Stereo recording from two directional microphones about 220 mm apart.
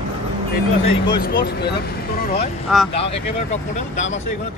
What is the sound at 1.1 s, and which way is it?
Speech, 45° left (ahead or behind).